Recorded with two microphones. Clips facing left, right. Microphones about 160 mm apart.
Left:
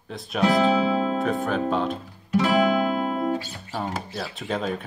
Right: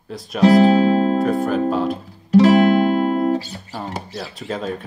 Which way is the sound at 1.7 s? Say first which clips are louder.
Right 4 dB; 5° right (ahead or behind).